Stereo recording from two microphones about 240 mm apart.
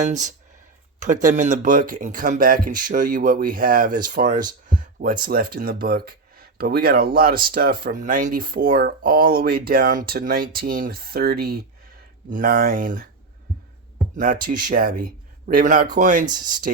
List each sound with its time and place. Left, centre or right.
0.1 s speech: right
14.2 s speech: right
16.2 s speech: centre